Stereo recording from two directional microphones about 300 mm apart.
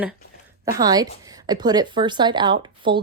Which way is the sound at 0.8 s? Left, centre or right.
Centre.